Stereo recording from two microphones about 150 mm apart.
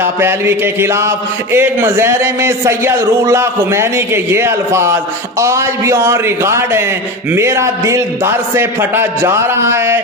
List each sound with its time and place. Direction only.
0.0 s a man's voice: 15° right (ahead or behind)